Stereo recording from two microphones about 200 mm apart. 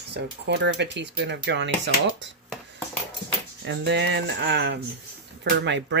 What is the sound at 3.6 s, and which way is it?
Speech, 60° right (ahead or behind).